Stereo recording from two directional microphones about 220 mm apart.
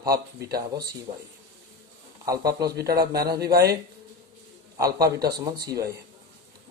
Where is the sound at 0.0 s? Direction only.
15° right (ahead or behind).